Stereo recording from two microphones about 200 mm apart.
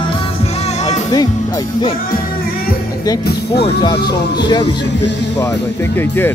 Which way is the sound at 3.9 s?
55° left (ahead or behind).